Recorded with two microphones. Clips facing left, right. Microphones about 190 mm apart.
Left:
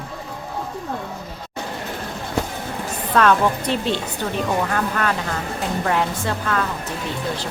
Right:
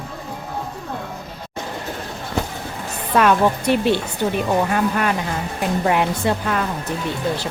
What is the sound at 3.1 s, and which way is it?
Speech, 10° right (ahead or behind).